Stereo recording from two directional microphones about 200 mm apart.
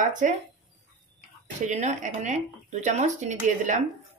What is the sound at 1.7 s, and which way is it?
Speech, 35° right (ahead or behind).